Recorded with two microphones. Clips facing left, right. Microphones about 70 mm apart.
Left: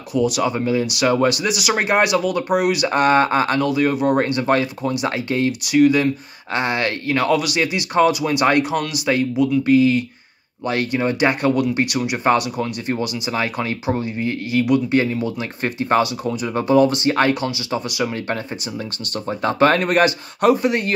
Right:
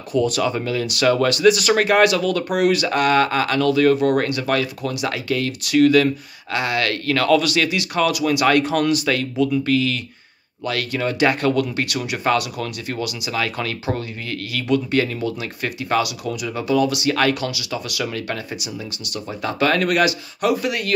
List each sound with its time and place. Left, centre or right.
0.1 s speech: centre; by 3.6 s left
3.6 s speech: centre
5.6 s speech: centre
8.7 s speech: centre
15.6 s speech: left